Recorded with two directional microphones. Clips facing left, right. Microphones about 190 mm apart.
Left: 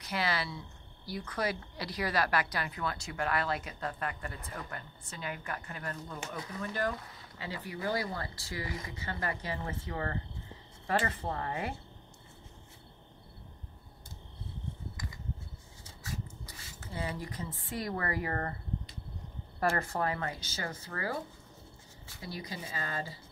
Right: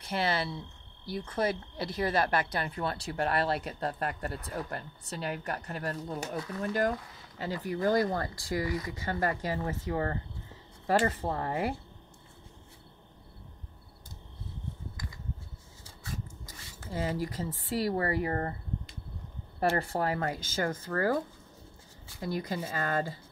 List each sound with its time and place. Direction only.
0.0 s speech: 25° right (ahead or behind)
16.9 s speech: 40° right (ahead or behind)
19.7 s speech: 35° right (ahead or behind)
22.2 s speech: 50° right (ahead or behind)